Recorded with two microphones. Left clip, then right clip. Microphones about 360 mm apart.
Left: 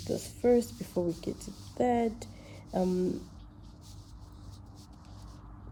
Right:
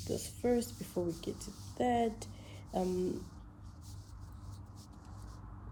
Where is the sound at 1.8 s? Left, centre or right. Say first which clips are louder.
Left 4 dB; left.